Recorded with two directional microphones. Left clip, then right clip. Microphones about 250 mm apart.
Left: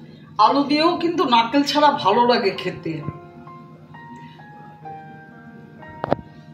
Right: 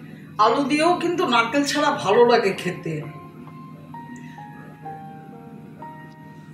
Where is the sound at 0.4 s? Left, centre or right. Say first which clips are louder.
Left 2 dB; left.